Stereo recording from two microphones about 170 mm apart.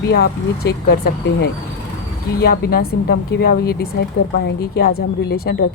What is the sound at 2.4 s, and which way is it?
Speech, 60° left (ahead or behind).